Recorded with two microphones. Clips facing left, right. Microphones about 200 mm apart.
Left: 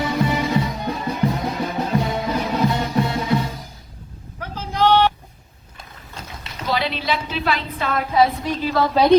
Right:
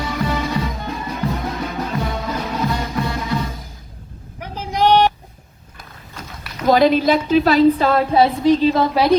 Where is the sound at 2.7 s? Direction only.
25° left (ahead or behind).